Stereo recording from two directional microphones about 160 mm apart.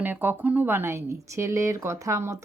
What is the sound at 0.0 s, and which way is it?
Speech, 10° right (ahead or behind).